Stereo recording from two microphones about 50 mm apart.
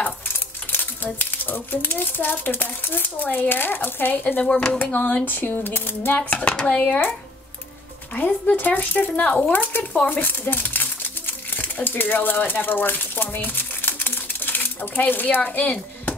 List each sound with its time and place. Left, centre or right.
0.7 s speech: left
4.4 s speech: left
4.9 s speech: left
6.7 s speech: left
8.1 s speech: left